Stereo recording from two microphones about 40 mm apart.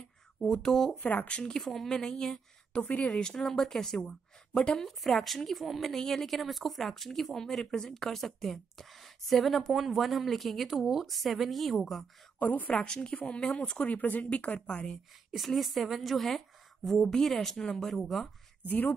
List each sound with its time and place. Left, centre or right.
0.4 s a woman's voice: centre
1.0 s speech: left
1.5 s a woman's voice: centre
2.7 s speech: left
3.2 s a woman's voice: centre
12.4 s a woman's voice: left
12.7 s speech: left
13.8 s speech: left
15.3 s a woman's voice: centre
18.7 s a woman's voice: left